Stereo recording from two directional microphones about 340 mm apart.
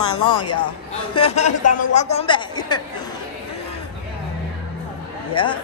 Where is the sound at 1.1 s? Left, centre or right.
Centre.